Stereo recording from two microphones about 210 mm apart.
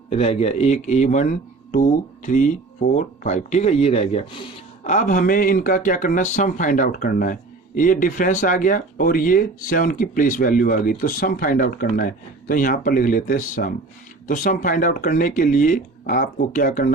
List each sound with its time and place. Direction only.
0.1 s speech: 30° left (ahead or behind)